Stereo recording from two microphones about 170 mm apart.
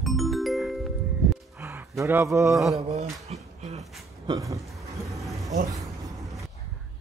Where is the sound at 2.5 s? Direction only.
Centre (ahead or behind).